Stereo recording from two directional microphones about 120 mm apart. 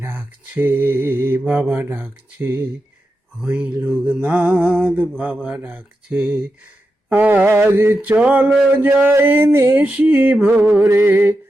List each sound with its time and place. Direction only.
0.0 s mantra: 15° right (ahead or behind)